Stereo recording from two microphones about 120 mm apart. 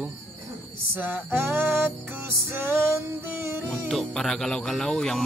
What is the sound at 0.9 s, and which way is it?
Music, 15° right (ahead or behind).